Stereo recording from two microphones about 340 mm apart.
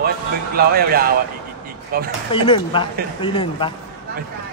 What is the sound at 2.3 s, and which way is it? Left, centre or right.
A man's voice, centre.